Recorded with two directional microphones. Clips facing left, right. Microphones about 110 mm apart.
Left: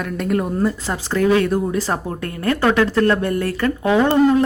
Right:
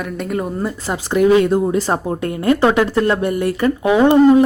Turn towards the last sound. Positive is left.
turn(degrees=-15)  # may be behind; listen again after turning